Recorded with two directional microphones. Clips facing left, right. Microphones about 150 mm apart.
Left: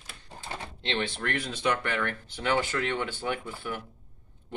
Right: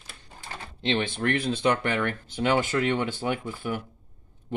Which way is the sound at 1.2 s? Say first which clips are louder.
Right 6 dB; 25° right (ahead or behind).